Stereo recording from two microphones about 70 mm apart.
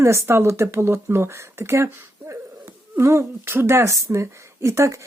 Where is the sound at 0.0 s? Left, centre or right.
Right.